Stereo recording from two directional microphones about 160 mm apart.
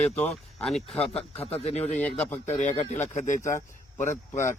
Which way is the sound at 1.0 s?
40° left (ahead or behind).